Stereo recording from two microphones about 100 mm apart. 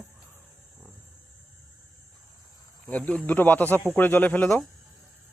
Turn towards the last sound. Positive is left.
turn(degrees=15)  # may be behind; listen again after turning